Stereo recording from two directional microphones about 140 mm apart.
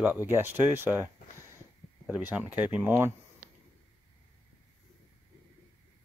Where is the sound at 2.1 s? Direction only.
10° right (ahead or behind).